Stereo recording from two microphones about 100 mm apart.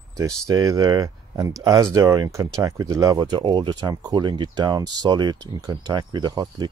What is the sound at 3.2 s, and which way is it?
Speech, 50° right (ahead or behind).